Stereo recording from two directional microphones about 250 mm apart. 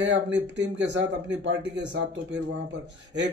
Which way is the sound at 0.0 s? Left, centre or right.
Right.